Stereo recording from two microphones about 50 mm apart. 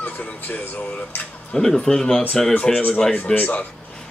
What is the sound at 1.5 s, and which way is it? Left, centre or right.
Speech, centre.